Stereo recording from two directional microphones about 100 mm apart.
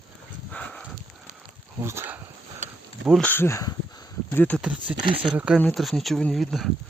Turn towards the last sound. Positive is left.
turn(degrees=0)  # may be behind; listen again after turning